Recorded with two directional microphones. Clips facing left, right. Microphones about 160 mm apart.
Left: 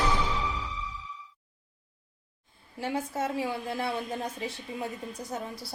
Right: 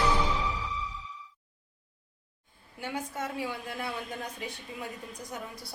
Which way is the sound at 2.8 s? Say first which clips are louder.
Left 4 dB; 30° left (ahead or behind).